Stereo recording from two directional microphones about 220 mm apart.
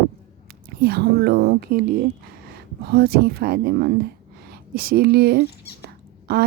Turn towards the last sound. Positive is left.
turn(degrees=-45)  # may be behind; listen again after turning